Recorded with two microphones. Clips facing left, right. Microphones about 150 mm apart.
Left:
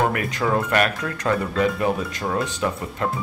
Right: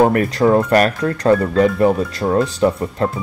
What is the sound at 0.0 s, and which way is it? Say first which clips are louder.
Speech: right 9 dB; 40° right (ahead or behind).